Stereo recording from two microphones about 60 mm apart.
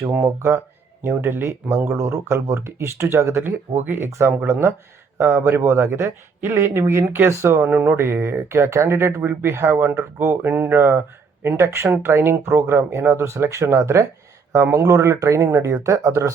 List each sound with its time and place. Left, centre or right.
0.0 s speech: right
1.9 s speech: right
3.4 s speech: right
7.7 s speech: right
7.9 s speech: right
14.5 s speech: right